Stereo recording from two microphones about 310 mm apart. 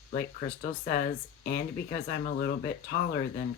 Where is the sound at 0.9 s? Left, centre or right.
Left.